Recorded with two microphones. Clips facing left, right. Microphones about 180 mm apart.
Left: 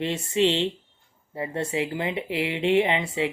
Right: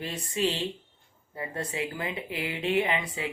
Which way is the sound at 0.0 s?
25° left (ahead or behind).